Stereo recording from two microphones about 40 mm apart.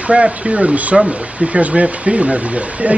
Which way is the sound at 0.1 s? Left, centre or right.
Right.